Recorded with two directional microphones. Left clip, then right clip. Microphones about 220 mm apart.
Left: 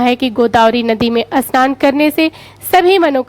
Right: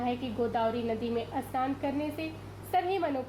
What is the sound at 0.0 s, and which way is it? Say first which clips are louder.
A woman's voice: left 19 dB; 55° left (ahead or behind).